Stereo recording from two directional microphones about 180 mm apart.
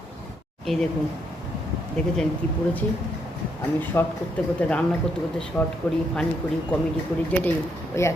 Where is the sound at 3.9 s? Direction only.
15° left (ahead or behind).